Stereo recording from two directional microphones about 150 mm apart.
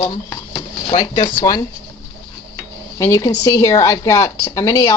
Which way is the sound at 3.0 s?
20° left (ahead or behind).